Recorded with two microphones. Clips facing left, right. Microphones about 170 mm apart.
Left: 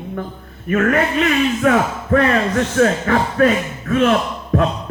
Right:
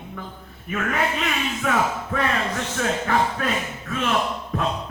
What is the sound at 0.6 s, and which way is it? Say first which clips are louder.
Speech: left 8 dB; 65° left (ahead or behind).